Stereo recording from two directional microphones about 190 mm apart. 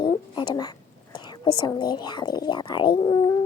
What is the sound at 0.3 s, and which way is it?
Whispering, 20° left (ahead or behind).